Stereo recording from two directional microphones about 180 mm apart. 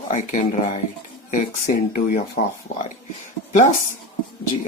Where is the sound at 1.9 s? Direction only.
55° left (ahead or behind).